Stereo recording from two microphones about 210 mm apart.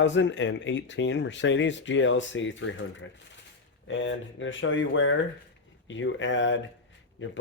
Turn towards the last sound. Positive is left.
turn(degrees=60)  # may be behind; listen again after turning